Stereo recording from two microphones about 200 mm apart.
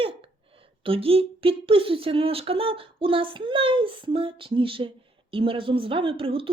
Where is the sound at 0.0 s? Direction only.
25° right (ahead or behind).